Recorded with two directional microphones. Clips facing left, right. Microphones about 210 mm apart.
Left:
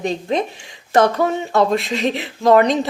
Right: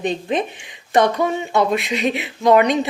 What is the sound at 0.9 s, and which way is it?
Speech, 20° right (ahead or behind).